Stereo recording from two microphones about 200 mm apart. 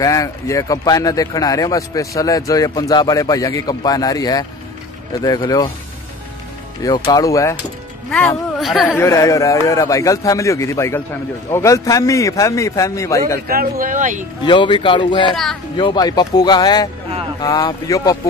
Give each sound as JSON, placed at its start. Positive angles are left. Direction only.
{"t": 0.0, "sound": "speech", "side_deg": 15}
{"t": 7.1, "sound": "speech", "side_deg": 15}
{"t": 8.5, "sound": "speech", "side_deg": 0}
{"t": 8.9, "sound": "speech", "side_deg": 15}
{"t": 13.5, "sound": "speech", "side_deg": -45}
{"t": 14.4, "sound": "speech", "side_deg": 25}